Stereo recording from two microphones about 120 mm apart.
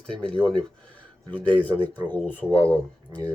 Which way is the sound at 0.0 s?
10° left (ahead or behind).